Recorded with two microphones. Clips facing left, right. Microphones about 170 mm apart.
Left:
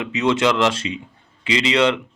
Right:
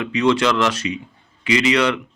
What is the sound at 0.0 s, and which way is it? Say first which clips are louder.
Speech: right 1 dB; 20° left (ahead or behind).